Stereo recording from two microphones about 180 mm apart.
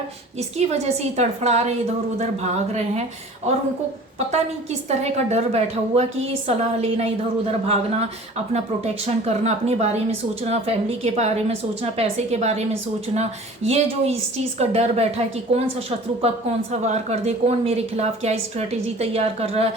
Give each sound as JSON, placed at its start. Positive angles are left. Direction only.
{"t": 0.3, "sound": "a woman's voice", "side_deg": -35}
{"t": 4.9, "sound": "a woman's voice", "side_deg": -40}
{"t": 8.5, "sound": "a woman's voice", "side_deg": -35}